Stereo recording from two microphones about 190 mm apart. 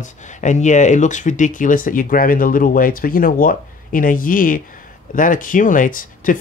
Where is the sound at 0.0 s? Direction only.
40° left (ahead or behind).